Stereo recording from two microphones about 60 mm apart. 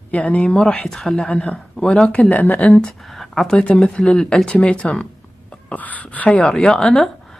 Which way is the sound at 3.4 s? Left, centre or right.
Centre.